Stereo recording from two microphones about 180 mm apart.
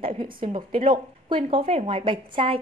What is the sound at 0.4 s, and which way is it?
A woman's voice, 30° right (ahead or behind).